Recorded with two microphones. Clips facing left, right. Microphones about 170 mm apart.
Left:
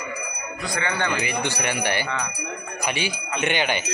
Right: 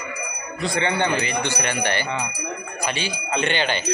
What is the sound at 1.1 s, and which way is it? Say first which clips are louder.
Speech: right 2 dB; 15° left (ahead or behind).